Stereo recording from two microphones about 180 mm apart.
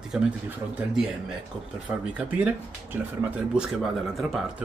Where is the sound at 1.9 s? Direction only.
10° right (ahead or behind).